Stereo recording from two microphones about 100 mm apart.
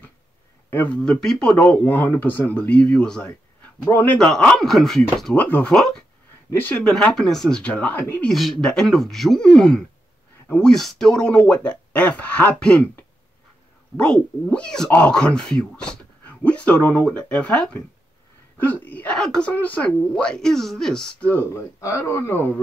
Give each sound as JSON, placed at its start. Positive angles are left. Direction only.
{"t": 0.7, "sound": "speech", "side_deg": 15}
{"t": 1.6, "sound": "speech", "side_deg": 20}
{"t": 4.2, "sound": "speech", "side_deg": 10}
{"t": 5.3, "sound": "speech", "side_deg": 15}
{"t": 6.5, "sound": "speech", "side_deg": 20}
{"t": 6.8, "sound": "speech", "side_deg": 10}
{"t": 8.2, "sound": "speech", "side_deg": 0}
{"t": 21.5, "sound": "speech", "side_deg": 30}